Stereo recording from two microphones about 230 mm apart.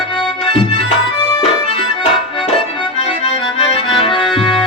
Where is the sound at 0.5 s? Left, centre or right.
Left.